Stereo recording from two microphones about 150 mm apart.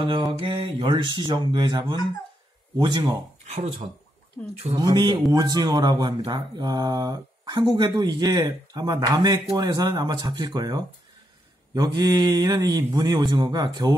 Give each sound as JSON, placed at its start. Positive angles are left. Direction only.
{"t": 0.0, "sound": "mantra", "side_deg": -35}
{"t": 2.8, "sound": "speech", "side_deg": -30}
{"t": 3.4, "sound": "speech", "side_deg": -60}
{"t": 4.7, "sound": "speech", "side_deg": -25}